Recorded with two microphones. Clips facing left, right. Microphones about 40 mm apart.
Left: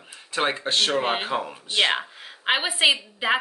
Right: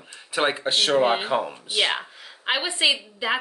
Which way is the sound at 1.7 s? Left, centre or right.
Centre.